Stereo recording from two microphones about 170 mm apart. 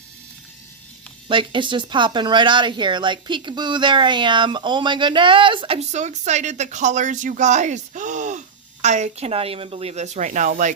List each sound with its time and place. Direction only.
1.3 s speech: 30° right (ahead or behind); by 10.8 s 50° right (ahead or behind)